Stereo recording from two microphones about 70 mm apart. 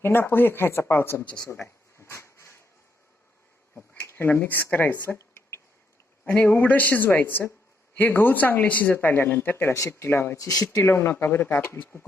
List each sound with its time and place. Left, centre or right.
0.0 s speech: left
1.5 s a sound: left
3.9 s speech: left
6.2 s a man's voice: centre
9.7 s speech: left
10.3 s speech: left
10.8 s speech: left